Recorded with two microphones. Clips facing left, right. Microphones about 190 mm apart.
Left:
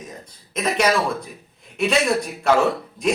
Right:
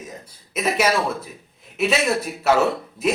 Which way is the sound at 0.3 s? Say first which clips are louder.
Right 1 dB; 5° right (ahead or behind).